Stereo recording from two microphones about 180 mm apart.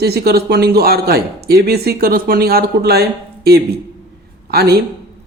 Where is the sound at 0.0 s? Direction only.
60° right (ahead or behind).